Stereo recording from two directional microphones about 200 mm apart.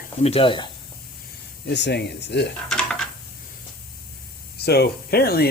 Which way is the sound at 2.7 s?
5° left (ahead or behind).